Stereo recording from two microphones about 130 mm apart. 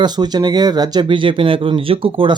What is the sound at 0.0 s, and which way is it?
Speech, 30° right (ahead or behind).